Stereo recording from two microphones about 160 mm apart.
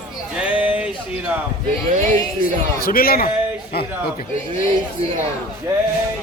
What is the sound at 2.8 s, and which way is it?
Speech, 65° left (ahead or behind).